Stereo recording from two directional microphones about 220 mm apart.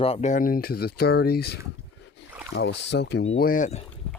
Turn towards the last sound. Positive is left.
turn(degrees=35)  # may be behind; listen again after turning